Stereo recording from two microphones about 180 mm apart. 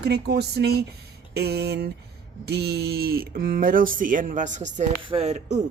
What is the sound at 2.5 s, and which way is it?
A woman's voice, 65° right (ahead or behind).